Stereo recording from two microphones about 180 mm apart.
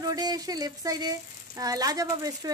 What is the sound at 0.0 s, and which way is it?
Speech, 20° right (ahead or behind).